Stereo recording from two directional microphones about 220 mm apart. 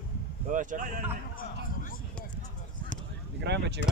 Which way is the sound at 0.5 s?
35° right (ahead or behind).